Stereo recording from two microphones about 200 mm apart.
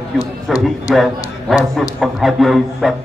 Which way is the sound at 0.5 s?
Centre (ahead or behind).